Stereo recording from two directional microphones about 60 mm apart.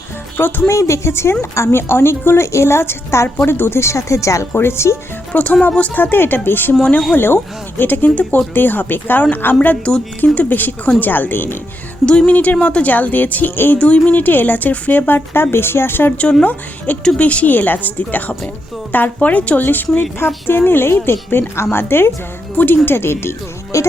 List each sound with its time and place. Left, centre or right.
0.3 s speech: left
0.7 s a woman's voice: left
4.5 s a woman's voice: left
5.3 s a woman's voice: left
7.8 s a woman's voice: left
12.0 s a woman's voice: centre
13.7 s a woman's voice: left
16.4 s a woman's voice: left
20.0 s a woman's voice: left
23.7 s speech: left